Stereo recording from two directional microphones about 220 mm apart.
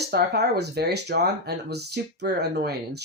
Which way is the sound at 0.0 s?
45° right (ahead or behind).